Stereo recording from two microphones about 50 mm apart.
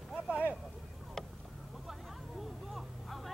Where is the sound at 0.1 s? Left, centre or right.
Right.